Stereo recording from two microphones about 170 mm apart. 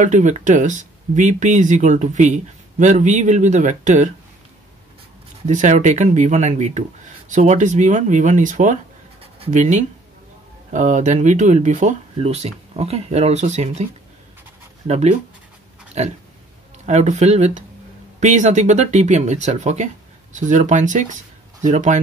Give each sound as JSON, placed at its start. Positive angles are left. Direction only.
{"t": 0.0, "sound": "speech", "side_deg": -45}
{"t": 5.5, "sound": "speech", "side_deg": -45}
{"t": 14.9, "sound": "speech", "side_deg": -40}